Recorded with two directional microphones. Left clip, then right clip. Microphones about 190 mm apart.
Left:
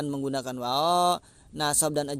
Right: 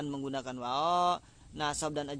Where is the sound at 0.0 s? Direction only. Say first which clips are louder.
Left 6 dB; 40° left (ahead or behind).